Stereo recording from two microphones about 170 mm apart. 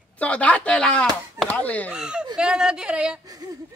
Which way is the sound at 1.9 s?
5° right (ahead or behind).